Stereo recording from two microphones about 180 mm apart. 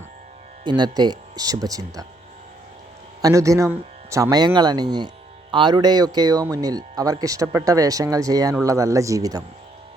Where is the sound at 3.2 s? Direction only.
20° right (ahead or behind).